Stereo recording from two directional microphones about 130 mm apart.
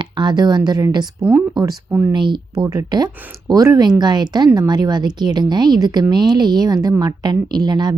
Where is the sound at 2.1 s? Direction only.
40° right (ahead or behind).